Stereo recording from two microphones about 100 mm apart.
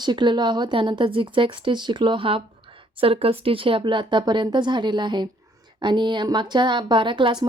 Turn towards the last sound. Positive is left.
turn(degrees=-55)  # may be behind; listen again after turning